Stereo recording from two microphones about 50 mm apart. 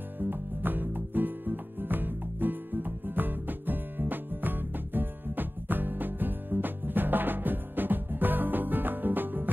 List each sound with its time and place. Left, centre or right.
0.2 s music: right